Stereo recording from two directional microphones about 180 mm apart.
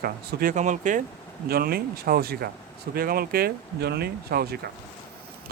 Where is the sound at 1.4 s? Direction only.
55° right (ahead or behind).